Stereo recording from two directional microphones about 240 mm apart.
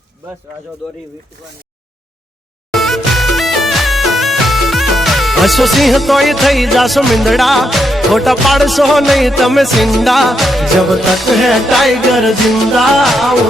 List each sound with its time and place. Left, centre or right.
2.7 s music: centre